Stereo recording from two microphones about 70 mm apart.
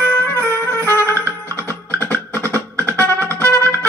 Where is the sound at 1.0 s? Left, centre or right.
Right.